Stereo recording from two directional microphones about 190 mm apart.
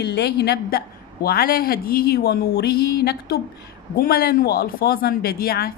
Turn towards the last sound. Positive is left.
turn(degrees=55)  # may be behind; listen again after turning